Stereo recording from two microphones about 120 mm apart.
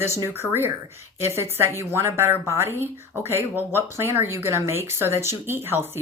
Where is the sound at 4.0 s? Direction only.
20° right (ahead or behind).